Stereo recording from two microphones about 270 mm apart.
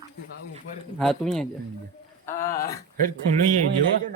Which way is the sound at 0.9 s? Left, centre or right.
Centre.